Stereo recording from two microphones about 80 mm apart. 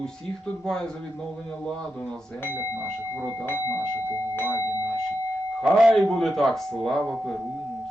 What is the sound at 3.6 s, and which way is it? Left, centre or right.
Speech, left.